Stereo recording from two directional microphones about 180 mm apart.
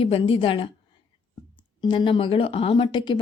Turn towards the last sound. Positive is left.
turn(degrees=25)  # may be behind; listen again after turning